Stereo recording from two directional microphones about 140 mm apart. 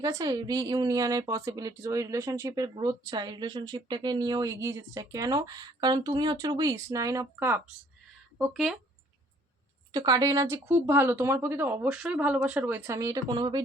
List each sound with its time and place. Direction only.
0.0 s speech: 25° right (ahead or behind)
8.4 s speech: centre (ahead or behind)
9.9 s speech: 25° right (ahead or behind)